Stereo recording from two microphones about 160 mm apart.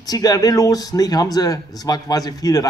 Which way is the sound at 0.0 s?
25° left (ahead or behind).